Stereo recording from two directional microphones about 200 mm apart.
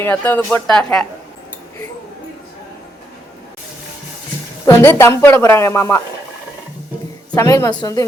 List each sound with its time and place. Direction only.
0.0 s speech: 10° left (ahead or behind)
4.6 s speech: 15° left (ahead or behind)
7.3 s speech: 15° left (ahead or behind)